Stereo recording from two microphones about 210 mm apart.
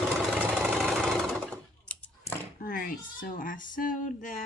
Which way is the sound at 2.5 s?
45° left (ahead or behind).